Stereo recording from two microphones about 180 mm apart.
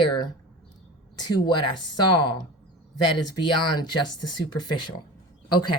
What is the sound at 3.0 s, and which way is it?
Speech, 25° left (ahead or behind).